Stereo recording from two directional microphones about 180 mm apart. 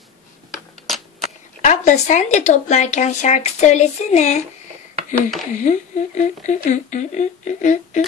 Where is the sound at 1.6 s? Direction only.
40° left (ahead or behind).